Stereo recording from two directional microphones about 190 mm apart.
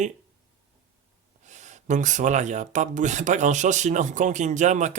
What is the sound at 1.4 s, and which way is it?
Speech, 40° right (ahead or behind).